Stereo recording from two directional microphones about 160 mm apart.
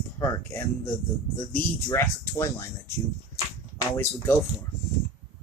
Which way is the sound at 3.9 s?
15° left (ahead or behind).